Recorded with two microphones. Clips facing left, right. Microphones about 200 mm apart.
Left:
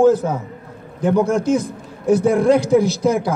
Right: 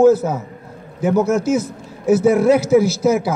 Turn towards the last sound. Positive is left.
turn(degrees=-5)  # may be behind; listen again after turning